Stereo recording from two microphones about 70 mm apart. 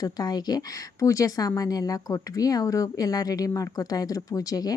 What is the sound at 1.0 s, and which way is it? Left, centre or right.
Speech, left.